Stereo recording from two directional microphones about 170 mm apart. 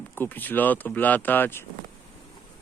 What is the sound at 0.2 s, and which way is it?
Speech, 10° left (ahead or behind).